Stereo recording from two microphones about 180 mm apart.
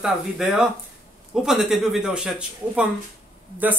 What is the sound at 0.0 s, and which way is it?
Speech, centre (ahead or behind).